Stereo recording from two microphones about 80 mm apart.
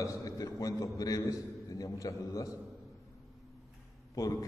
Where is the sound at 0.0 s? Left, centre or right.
Left.